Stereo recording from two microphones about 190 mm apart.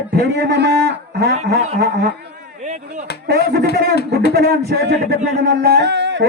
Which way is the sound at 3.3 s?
55° right (ahead or behind).